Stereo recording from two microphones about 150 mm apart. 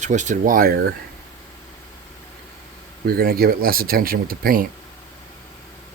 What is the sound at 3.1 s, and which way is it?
Speech, 80° right.